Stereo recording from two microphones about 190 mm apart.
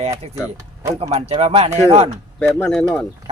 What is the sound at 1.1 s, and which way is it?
Speech, 35° right (ahead or behind).